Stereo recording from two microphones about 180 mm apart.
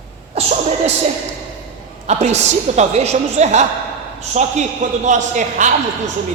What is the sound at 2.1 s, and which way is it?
A man's voice, 40° right (ahead or behind).